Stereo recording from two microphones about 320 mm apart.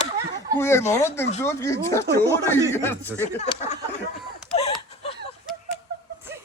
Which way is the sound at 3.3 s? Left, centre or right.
Left.